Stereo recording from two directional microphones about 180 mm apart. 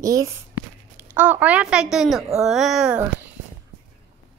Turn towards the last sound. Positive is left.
turn(degrees=-5)  # may be behind; listen again after turning